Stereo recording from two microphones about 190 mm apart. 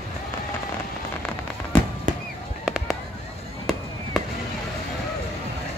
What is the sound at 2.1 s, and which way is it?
Fireworks, 45° right (ahead or behind).